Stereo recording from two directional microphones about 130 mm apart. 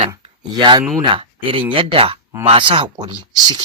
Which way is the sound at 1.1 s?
45° right (ahead or behind).